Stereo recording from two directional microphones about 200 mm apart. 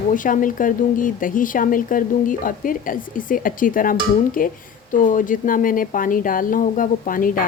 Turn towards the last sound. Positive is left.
turn(degrees=45)  # may be behind; listen again after turning